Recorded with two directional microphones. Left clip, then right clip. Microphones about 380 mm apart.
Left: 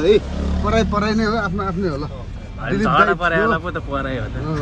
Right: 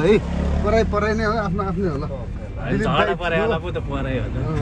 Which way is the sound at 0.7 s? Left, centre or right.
Centre.